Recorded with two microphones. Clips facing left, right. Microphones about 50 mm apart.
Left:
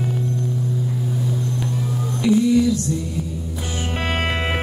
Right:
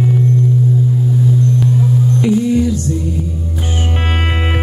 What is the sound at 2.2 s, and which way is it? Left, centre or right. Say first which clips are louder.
Music: left 1 dB; right.